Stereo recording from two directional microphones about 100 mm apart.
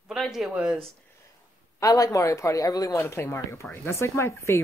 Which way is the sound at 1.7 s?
35° left (ahead or behind).